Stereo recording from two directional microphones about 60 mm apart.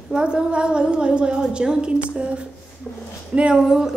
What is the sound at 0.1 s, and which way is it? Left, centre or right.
A woman's voice, centre.